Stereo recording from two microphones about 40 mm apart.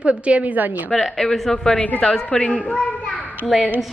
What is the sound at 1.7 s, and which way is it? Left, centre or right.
Speech, left.